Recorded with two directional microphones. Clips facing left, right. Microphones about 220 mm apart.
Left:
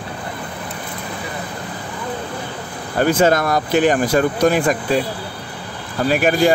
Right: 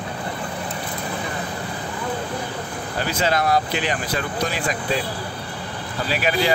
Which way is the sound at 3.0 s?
50° left (ahead or behind).